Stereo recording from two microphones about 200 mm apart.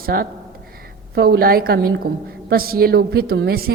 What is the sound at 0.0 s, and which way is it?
A woman's voice, 45° right (ahead or behind).